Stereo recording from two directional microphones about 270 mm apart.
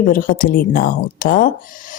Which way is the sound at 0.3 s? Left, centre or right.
Left.